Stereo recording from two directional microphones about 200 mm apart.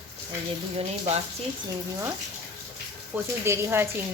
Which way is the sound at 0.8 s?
30° right (ahead or behind).